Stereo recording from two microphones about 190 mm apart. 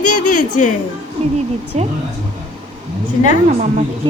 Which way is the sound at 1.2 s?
35° right (ahead or behind).